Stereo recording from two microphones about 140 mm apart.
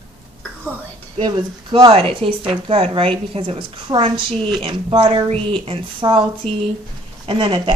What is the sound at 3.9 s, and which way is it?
Speech, 30° right (ahead or behind).